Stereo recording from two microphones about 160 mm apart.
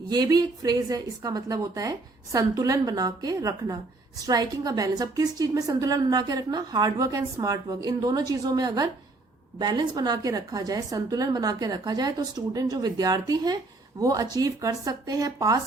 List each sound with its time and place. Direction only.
0.1 s a woman's voice: 25° right (ahead or behind)